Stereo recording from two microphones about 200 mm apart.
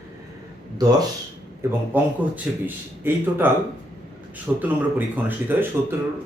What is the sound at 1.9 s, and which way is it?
Speech, 10° right (ahead or behind).